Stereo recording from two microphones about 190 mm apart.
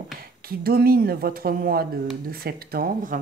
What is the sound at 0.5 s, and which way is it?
Speech, 50° right (ahead or behind).